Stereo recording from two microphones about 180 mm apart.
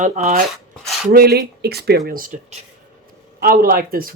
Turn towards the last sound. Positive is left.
turn(degrees=-55)  # may be behind; listen again after turning